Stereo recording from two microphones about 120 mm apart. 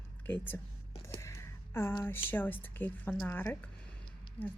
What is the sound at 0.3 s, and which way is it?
A woman's voice, 15° left (ahead or behind).